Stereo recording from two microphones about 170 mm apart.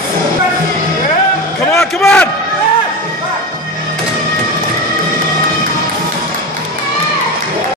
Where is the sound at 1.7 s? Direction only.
15° left (ahead or behind).